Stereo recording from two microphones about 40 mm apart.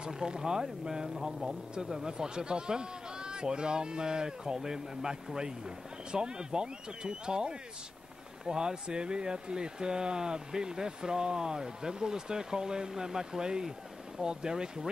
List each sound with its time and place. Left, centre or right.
0.0 s speech: centre